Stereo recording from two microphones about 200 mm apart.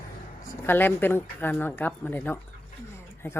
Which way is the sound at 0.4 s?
10° left (ahead or behind).